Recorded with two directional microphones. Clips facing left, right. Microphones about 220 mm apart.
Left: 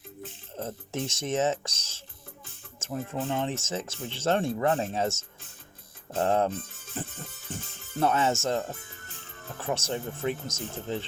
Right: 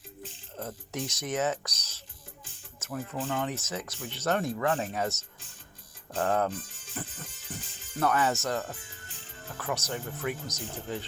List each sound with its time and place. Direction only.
0.6 s speech: 25° left (ahead or behind)